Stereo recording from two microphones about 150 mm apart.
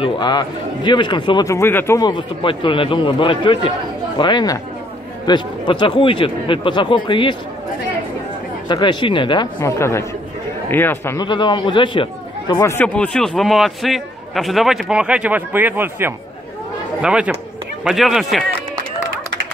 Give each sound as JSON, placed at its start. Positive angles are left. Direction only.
{"t": 0.0, "sound": "a man's voice", "side_deg": 30}
{"t": 2.0, "sound": "a man's voice", "side_deg": 30}
{"t": 8.6, "sound": "speech", "side_deg": 30}
{"t": 9.6, "sound": "a man's voice", "side_deg": 20}
{"t": 11.2, "sound": "a man's voice", "side_deg": 30}
{"t": 12.5, "sound": "a man's voice", "side_deg": 20}
{"t": 12.8, "sound": "a man's voice", "side_deg": 10}